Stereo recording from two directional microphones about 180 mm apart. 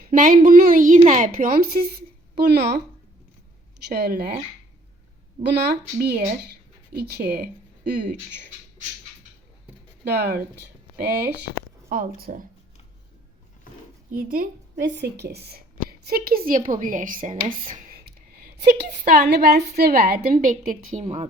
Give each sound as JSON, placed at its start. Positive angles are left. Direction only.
{"t": 0.1, "sound": "a woman's voice", "side_deg": -50}
{"t": 3.8, "sound": "a woman's voice", "side_deg": -60}
{"t": 5.4, "sound": "speech", "side_deg": -70}
{"t": 10.0, "sound": "speech", "side_deg": -65}
{"t": 11.9, "sound": "a woman's voice", "side_deg": -55}
{"t": 14.1, "sound": "a woman's voice", "side_deg": -50}
{"t": 14.8, "sound": "a woman's voice", "side_deg": -65}
{"t": 18.3, "sound": "a woman's voice", "side_deg": -65}